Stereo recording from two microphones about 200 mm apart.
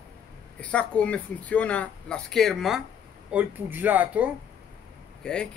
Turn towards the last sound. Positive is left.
turn(degrees=5)  # may be behind; listen again after turning